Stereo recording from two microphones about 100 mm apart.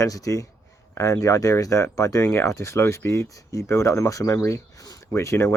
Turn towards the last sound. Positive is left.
turn(degrees=30)  # may be behind; listen again after turning